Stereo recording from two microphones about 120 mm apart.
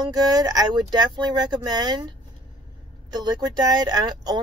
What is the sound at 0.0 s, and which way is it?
Speech, 35° right (ahead or behind).